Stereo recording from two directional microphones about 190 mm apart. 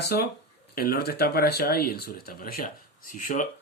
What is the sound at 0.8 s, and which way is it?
Speech, 55° left (ahead or behind).